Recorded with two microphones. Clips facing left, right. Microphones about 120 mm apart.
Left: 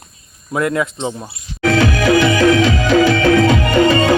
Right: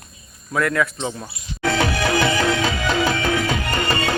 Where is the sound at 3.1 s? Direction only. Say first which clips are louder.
Left 9 dB; 90° left.